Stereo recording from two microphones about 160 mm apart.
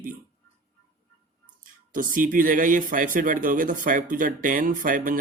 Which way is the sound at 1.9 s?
55° right (ahead or behind).